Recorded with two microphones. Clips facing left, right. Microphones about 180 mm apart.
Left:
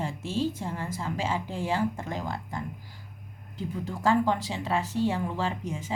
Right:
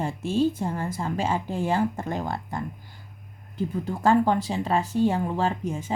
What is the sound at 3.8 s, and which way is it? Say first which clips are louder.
Speech: right 3 dB; 55° right (ahead or behind).